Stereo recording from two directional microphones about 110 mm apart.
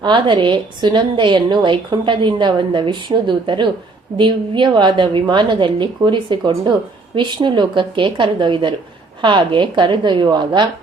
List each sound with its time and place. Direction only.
0.0 s a woman's voice: 50° right (ahead or behind)